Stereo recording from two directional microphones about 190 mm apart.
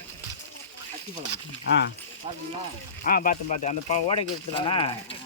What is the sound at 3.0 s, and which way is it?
Speech, 50° left (ahead or behind).